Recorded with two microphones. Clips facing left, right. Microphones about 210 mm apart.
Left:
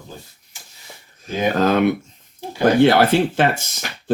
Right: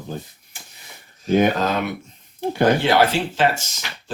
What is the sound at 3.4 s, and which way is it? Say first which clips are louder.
Speech: left 1 dB; 55° left (ahead or behind).